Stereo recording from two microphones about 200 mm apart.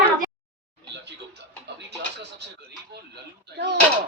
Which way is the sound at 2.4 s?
55° right (ahead or behind).